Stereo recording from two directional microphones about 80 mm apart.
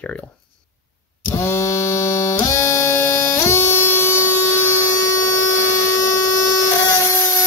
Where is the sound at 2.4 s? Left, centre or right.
Left.